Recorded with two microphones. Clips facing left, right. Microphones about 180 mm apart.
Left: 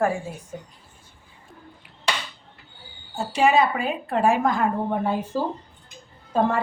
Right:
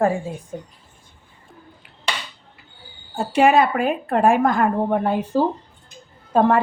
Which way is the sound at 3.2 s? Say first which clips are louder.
Right 4 dB; 60° right (ahead or behind).